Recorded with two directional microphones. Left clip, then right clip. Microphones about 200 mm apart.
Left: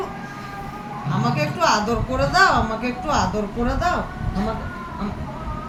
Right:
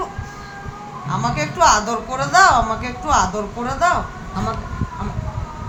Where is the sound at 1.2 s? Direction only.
40° right (ahead or behind).